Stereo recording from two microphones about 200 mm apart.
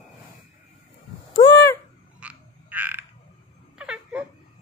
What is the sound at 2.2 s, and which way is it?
Frog, 5° right (ahead or behind).